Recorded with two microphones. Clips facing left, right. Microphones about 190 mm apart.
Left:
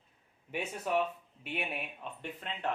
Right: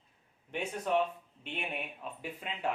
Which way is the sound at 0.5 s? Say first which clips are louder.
Right 1 dB; 5° left (ahead or behind).